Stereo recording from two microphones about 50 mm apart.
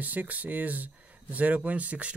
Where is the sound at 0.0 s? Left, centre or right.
Right.